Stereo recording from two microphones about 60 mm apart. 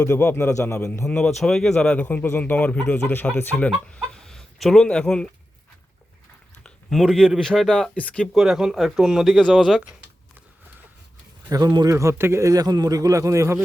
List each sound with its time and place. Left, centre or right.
0.1 s speech: left
0.5 s a man's voice: left
1.4 s speech: centre
2.0 s a man's voice: left
3.0 s speech: left
3.6 s speech: centre
6.9 s speech: centre
7.3 s speech: centre
7.9 s a man's voice: centre
8.3 s speech: centre
11.4 s speech: right
12.1 s speech: right
12.5 s a man's voice: right